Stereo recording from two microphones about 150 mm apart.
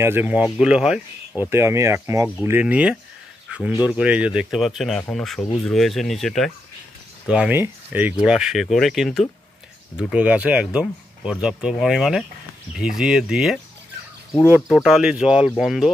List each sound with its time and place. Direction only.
0.0 s speech: 15° right (ahead or behind)
3.5 s a sound: 10° right (ahead or behind)
3.8 s speech: 10° right (ahead or behind)
14.7 s speech: 5° right (ahead or behind)